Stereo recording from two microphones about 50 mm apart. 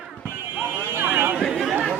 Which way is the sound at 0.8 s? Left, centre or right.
Right.